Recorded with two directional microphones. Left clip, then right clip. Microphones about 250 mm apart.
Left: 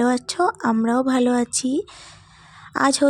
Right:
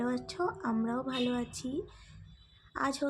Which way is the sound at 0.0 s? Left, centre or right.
Left.